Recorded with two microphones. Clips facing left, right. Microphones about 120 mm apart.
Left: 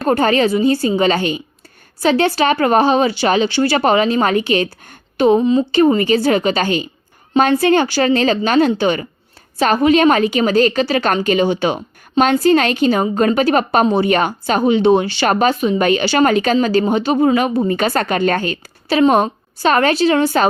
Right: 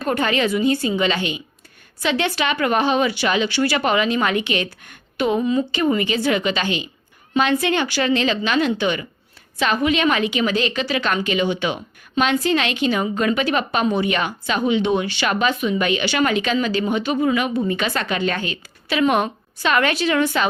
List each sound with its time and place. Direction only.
0.0 s a woman's voice: 35° left (ahead or behind)
5.8 s a woman's voice: 40° left (ahead or behind)